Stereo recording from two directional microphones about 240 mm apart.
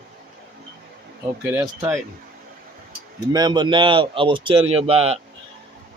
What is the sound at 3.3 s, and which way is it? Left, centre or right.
Speech, centre.